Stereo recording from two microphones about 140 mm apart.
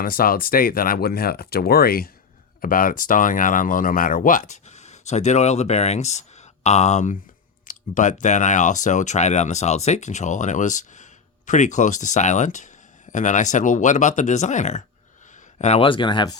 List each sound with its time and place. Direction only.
0.0 s speech: 90° left; by 15.9 s 50° left (ahead or behind)
15.9 s speech: 35° left (ahead or behind)